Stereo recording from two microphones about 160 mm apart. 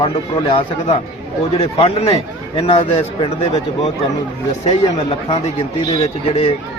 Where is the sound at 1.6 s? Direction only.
35° left (ahead or behind).